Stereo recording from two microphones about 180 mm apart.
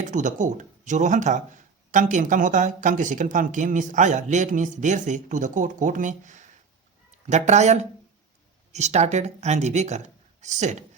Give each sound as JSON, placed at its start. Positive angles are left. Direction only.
{"t": 0.0, "sound": "speech", "side_deg": -45}